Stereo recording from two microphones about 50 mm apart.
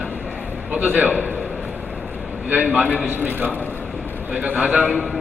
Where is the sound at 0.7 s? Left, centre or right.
Right.